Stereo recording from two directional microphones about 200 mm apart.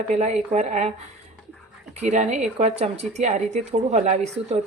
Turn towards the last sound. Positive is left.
turn(degrees=-35)  # may be behind; listen again after turning